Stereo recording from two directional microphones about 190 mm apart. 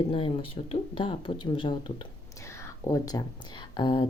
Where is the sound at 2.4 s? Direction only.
15° left (ahead or behind).